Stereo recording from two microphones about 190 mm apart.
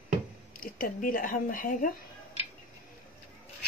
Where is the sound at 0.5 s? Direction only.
45° left (ahead or behind).